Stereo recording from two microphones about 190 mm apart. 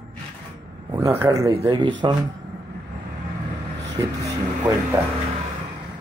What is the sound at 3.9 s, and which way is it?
Vehicle, 20° right (ahead or behind).